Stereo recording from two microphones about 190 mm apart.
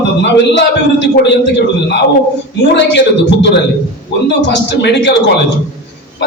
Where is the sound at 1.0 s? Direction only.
65° left (ahead or behind).